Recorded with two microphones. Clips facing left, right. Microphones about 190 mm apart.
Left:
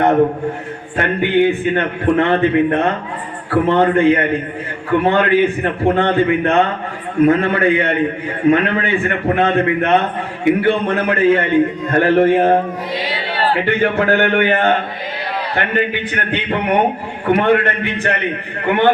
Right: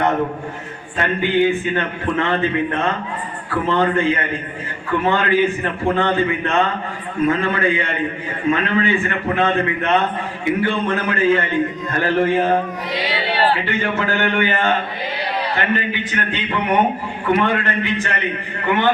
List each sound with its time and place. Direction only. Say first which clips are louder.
0.9 s a man's voice: left 3 dB; 60° left (ahead or behind)